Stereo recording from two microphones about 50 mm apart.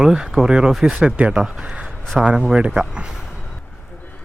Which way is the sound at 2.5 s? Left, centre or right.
Centre.